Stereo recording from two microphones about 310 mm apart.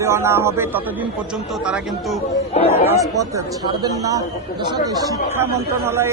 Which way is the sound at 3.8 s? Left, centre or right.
Centre.